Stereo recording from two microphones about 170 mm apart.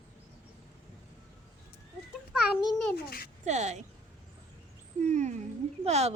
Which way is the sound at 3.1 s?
60° left (ahead or behind).